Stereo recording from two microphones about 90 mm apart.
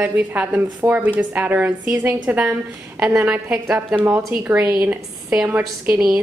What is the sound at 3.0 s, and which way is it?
A woman's voice, 30° right (ahead or behind).